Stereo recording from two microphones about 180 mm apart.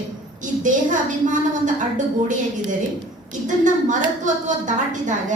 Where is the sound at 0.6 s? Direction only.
45° right (ahead or behind).